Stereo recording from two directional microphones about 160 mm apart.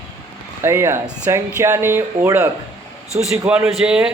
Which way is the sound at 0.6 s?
15° right (ahead or behind).